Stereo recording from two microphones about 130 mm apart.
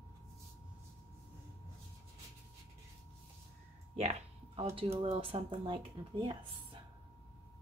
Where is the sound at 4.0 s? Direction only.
55° right (ahead or behind).